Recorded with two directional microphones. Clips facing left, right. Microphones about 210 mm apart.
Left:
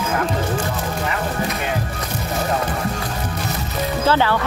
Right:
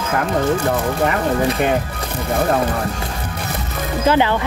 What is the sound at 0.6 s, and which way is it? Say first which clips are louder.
Speech: right 6 dB; 55° right (ahead or behind).